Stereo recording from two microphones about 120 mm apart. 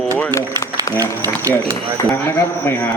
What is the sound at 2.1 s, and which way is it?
Speech, 20° left (ahead or behind).